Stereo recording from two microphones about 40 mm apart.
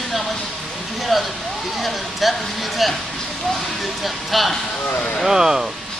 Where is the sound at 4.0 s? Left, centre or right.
Centre.